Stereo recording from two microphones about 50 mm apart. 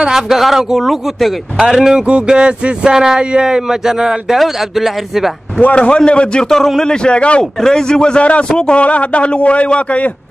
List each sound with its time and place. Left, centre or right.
0.0 s a man's voice: centre
5.8 s a man's voice: left